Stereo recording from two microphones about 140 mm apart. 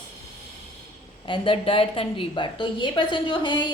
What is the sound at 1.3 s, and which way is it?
A woman's voice, 40° left (ahead or behind).